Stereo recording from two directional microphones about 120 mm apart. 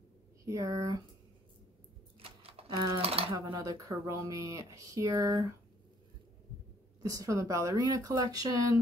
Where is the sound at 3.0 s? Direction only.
55° right (ahead or behind).